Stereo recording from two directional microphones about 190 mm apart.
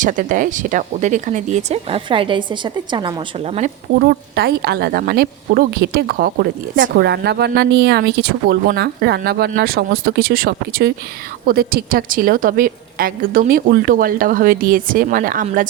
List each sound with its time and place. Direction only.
0.0 s speech: 45° right (ahead or behind); by 3.1 s 25° right (ahead or behind)
4.0 s a woman's voice: 55° right (ahead or behind)